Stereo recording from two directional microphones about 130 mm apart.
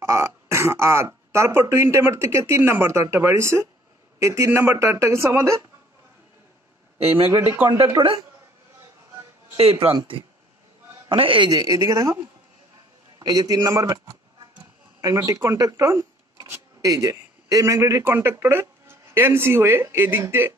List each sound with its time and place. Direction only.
0.0 s speech: 20° right (ahead or behind)
7.2 s a man's voice: 15° right (ahead or behind)
8.0 s speech: 25° right (ahead or behind)
9.6 s a man's voice: 45° right (ahead or behind); by 12.2 s 25° right (ahead or behind)
13.2 s speech: 30° right (ahead or behind)
15.0 s speech: 25° right (ahead or behind)